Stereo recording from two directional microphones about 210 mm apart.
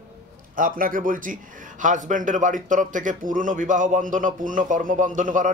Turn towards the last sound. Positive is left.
turn(degrees=-40)  # may be behind; listen again after turning